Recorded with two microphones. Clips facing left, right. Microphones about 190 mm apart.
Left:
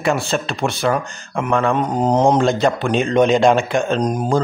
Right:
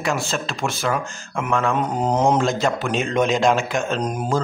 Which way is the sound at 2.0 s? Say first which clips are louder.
Left 4 dB; 35° left (ahead or behind).